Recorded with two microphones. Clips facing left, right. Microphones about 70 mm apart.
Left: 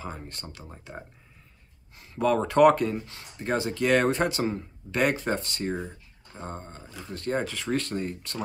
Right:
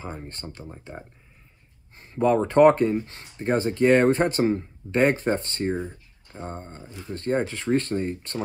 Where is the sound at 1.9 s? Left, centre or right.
Right.